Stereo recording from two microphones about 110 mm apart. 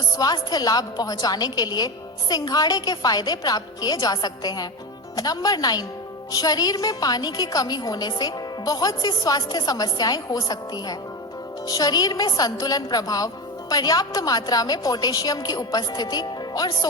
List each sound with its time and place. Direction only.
0.2 s a woman's voice: 35° left (ahead or behind)